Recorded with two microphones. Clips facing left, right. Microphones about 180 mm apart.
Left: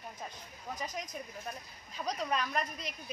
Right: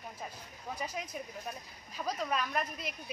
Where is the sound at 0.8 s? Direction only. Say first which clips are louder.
Right 1 dB; 10° right (ahead or behind).